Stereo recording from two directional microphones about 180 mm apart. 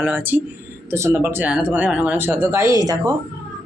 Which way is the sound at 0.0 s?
10° right (ahead or behind).